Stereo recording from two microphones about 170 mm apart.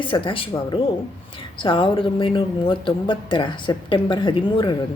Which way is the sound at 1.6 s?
30° left (ahead or behind).